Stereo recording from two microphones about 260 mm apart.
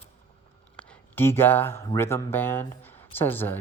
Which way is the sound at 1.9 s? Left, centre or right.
Centre.